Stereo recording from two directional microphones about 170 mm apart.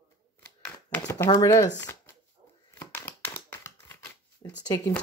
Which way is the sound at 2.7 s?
10° left (ahead or behind).